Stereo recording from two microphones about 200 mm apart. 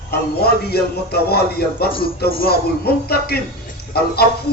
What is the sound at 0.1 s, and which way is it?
Speech, 55° left (ahead or behind).